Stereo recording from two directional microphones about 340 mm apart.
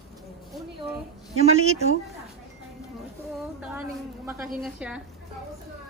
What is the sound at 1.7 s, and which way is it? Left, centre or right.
Speech, centre.